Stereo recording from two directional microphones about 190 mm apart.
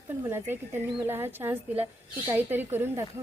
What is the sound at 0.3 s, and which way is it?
Speech, 10° right (ahead or behind).